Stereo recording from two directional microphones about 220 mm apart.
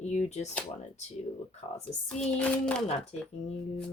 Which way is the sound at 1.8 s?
5° left (ahead or behind).